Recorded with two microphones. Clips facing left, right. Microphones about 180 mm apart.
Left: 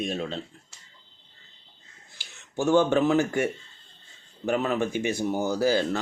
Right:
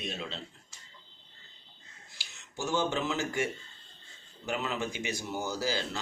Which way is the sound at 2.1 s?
55° left (ahead or behind).